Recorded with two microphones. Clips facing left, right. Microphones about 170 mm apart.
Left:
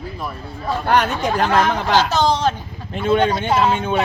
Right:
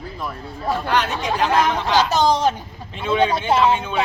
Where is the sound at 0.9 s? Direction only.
55° left (ahead or behind).